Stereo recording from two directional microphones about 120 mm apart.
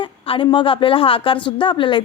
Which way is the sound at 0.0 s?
45° left (ahead or behind).